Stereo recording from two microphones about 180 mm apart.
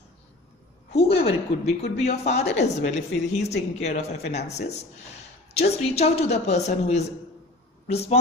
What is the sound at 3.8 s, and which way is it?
A woman's voice, 40° left (ahead or behind).